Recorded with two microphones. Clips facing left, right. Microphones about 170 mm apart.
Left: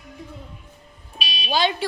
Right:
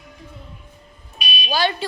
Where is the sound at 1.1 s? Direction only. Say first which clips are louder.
Even; 25° left (ahead or behind).